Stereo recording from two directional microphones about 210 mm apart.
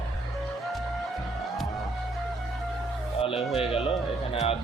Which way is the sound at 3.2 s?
25° left (ahead or behind).